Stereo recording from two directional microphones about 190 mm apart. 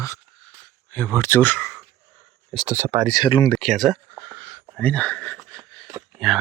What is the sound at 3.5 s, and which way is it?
Speech, centre (ahead or behind).